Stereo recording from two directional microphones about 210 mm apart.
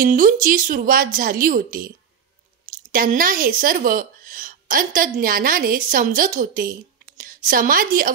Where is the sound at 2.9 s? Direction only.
40° right (ahead or behind).